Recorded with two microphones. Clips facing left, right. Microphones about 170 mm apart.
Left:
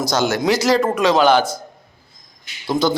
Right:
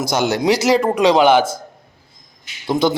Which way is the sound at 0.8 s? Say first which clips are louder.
Right 2 dB; 15° right (ahead or behind).